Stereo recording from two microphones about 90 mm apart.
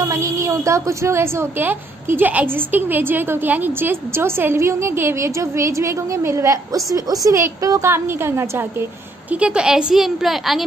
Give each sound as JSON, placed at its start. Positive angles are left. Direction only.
{"t": 0.0, "sound": "a woman's voice", "side_deg": -35}
{"t": 9.3, "sound": "a woman's voice", "side_deg": -10}